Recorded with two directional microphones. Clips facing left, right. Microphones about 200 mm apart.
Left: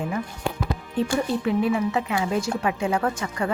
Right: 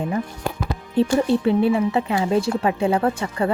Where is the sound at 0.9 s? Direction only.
30° right (ahead or behind).